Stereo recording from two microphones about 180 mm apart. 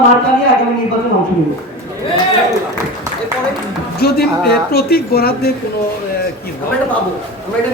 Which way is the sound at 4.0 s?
60° left (ahead or behind).